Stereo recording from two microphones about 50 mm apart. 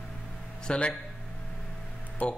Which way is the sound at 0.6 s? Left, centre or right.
Left.